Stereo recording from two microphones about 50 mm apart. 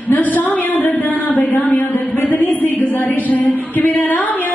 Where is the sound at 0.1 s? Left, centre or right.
Left.